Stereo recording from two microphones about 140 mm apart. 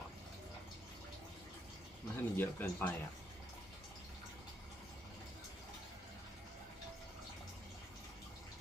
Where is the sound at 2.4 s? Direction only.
15° left (ahead or behind).